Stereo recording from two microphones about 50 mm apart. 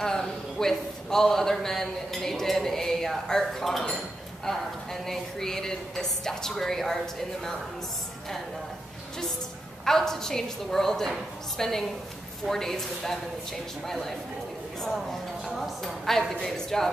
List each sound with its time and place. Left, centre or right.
0.0 s a man's voice: centre
9.8 s a woman's voice: centre
15.5 s a woman's voice: centre